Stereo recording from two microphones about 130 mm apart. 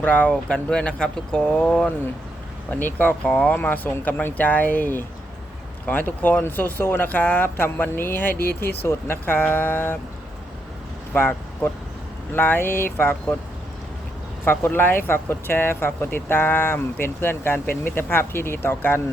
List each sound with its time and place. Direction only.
0.0 s speech: 10° left (ahead or behind)
11.1 s speech: 15° left (ahead or behind)
14.4 s speech: 15° left (ahead or behind)